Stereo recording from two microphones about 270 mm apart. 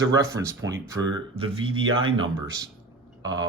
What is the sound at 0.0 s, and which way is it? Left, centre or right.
Speech, centre.